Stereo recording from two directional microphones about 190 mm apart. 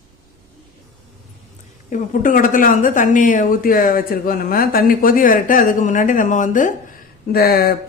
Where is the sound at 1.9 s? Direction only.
45° left (ahead or behind).